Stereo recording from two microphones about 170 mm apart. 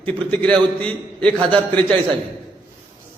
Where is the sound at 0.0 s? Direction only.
10° left (ahead or behind).